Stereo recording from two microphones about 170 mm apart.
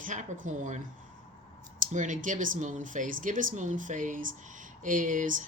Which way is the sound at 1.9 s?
45° right (ahead or behind).